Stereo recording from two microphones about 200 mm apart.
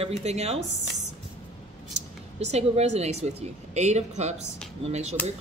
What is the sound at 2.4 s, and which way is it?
Speech, 30° right (ahead or behind).